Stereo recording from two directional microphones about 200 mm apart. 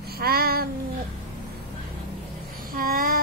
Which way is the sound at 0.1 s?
50° right (ahead or behind).